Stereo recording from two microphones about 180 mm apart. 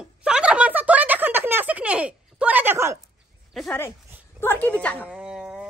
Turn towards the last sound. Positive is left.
turn(degrees=-5)  # may be behind; listen again after turning